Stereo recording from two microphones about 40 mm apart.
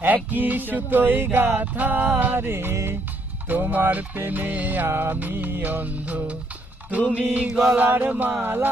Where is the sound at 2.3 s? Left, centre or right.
Right.